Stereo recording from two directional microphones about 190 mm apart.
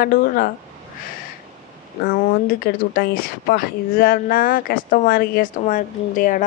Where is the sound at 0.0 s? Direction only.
50° left (ahead or behind).